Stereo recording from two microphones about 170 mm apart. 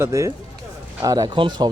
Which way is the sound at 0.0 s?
15° right (ahead or behind).